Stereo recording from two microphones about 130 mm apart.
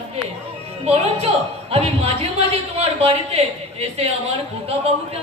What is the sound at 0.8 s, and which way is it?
A woman's voice, 50° right (ahead or behind).